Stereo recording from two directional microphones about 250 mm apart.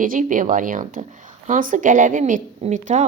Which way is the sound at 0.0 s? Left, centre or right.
Right.